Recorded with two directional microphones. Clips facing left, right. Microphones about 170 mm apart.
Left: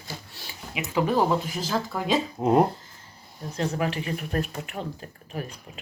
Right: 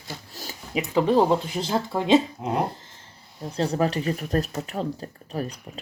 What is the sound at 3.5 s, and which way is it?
Speech, 35° right (ahead or behind).